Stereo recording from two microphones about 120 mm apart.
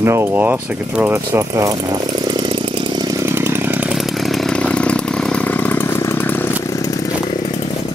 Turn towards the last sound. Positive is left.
turn(degrees=15)  # may be behind; listen again after turning